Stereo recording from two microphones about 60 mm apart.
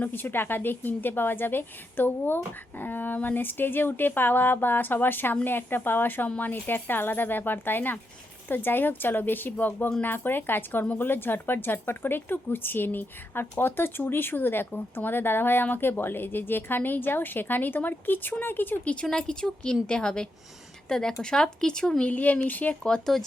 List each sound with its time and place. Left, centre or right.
0.0 s speech: left
19.1 s speech: centre